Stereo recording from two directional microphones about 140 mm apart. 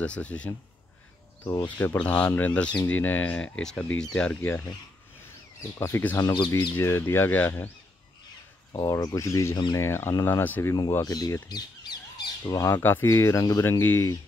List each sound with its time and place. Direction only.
0.0 s speech: 10° left (ahead or behind)
1.8 s speech: 15° left (ahead or behind); by 6.7 s 30° left (ahead or behind)
6.8 s speech: 20° left (ahead or behind)
8.7 s speech: 25° left (ahead or behind)
10.9 s speech: 25° left (ahead or behind)